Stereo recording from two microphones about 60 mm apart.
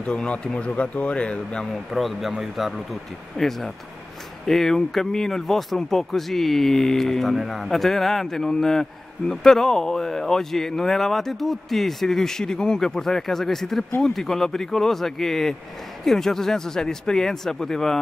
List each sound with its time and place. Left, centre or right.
0.0 s speech: centre
1.7 s speech: centre